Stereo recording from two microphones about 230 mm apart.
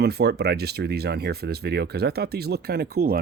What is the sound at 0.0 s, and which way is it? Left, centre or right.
Speech, right.